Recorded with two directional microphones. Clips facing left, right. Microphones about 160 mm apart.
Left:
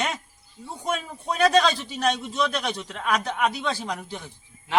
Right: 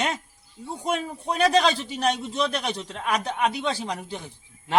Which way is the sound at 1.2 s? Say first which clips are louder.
Left 1 dB; 25° right (ahead or behind).